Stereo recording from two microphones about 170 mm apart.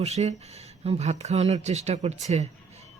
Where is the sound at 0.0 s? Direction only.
40° right (ahead or behind).